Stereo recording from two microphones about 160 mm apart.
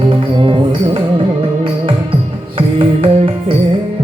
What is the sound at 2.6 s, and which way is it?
Music, 35° right (ahead or behind).